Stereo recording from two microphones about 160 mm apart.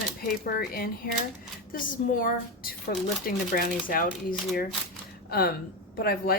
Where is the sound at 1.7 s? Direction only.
60° left (ahead or behind).